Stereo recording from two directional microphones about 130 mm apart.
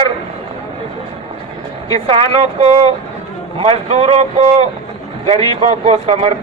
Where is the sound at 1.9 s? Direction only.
50° right (ahead or behind).